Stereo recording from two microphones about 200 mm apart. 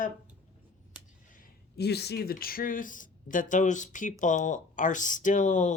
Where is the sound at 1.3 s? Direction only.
55° left (ahead or behind).